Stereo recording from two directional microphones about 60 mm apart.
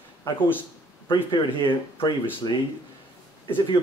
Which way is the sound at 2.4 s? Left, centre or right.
Left.